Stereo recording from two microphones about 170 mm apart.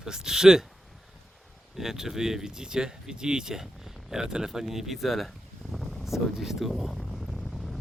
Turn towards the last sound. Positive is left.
turn(degrees=0)  # may be behind; listen again after turning